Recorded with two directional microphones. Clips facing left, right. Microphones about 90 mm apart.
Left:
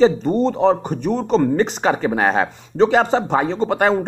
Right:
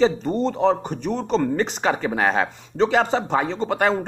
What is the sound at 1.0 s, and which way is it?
Speech, 45° left (ahead or behind).